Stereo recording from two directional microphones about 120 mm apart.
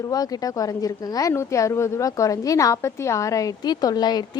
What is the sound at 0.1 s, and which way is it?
A woman's voice, 30° left (ahead or behind).